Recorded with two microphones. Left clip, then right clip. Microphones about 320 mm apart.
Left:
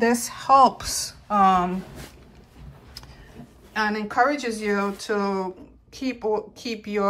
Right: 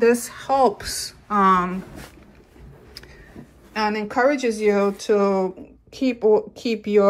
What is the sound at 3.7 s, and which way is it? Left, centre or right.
Speech, centre.